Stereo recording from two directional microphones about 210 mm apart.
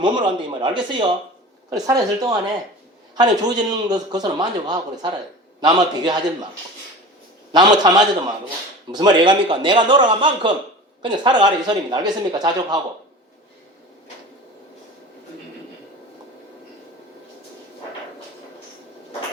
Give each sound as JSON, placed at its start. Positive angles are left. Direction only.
{"t": 0.0, "sound": "a man's voice", "side_deg": -20}
{"t": 7.5, "sound": "a man's voice", "side_deg": -20}